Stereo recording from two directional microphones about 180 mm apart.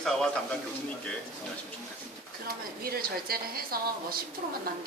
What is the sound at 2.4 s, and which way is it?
Speech, 55° right (ahead or behind).